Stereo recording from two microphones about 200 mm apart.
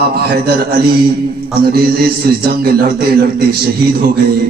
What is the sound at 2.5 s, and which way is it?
Speech, 50° right (ahead or behind).